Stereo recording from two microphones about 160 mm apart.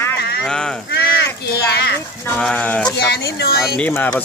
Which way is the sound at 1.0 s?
85° left.